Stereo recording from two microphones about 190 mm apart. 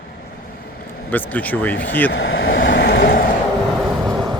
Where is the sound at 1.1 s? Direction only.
10° left (ahead or behind).